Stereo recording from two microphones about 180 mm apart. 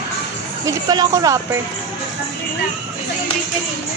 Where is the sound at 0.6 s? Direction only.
20° right (ahead or behind).